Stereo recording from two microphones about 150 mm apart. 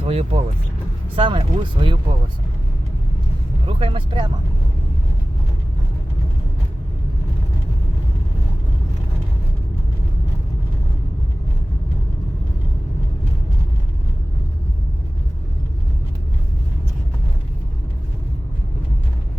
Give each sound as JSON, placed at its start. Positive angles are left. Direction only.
{"t": 0.0, "sound": "speech", "side_deg": -40}
{"t": 3.7, "sound": "speech", "side_deg": -35}